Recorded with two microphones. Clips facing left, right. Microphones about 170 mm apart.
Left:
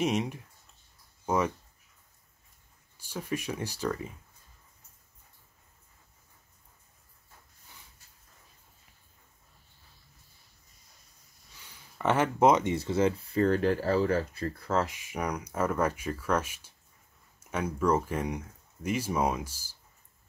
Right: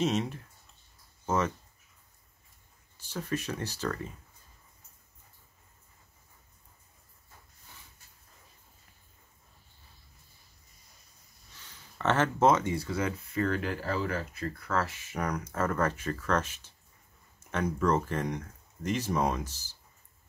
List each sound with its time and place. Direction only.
0.0 s speech: 15° left (ahead or behind)
3.0 s speech: 10° left (ahead or behind)
11.5 s speech: 10° left (ahead or behind); by 14.8 s 30° left (ahead or behind)
14.8 s speech: 15° left (ahead or behind)